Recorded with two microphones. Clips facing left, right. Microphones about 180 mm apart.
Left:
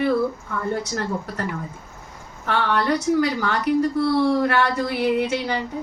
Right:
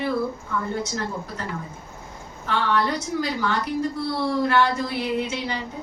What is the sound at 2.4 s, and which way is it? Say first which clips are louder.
A woman's voice: left 2 dB; 60° left (ahead or behind).